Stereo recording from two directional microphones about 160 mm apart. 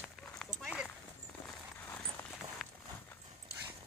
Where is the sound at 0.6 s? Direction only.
Centre (ahead or behind).